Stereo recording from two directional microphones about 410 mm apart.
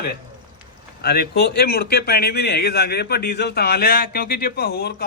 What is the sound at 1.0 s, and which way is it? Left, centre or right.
A man's voice, left.